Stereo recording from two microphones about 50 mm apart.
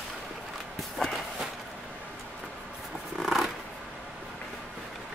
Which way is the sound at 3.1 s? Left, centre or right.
Centre.